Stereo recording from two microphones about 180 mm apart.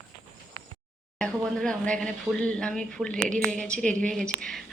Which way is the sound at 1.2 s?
5° left (ahead or behind).